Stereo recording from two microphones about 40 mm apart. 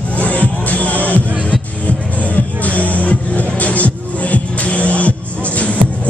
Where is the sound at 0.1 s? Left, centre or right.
Left.